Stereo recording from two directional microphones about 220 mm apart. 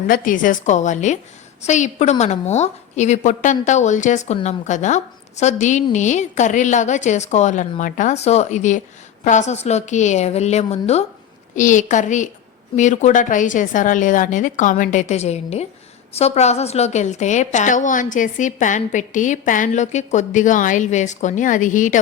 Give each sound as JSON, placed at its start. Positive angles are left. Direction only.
{"t": 0.1, "sound": "a woman's voice", "side_deg": 35}